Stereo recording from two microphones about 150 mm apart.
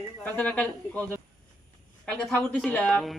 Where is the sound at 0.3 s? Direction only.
5° left (ahead or behind).